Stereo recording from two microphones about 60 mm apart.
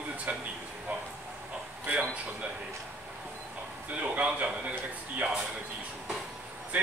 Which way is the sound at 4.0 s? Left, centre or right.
Right.